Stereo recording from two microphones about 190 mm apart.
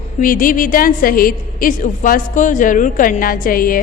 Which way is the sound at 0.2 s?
45° left (ahead or behind).